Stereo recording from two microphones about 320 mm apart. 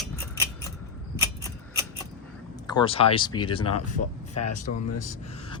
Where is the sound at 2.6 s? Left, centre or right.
Centre.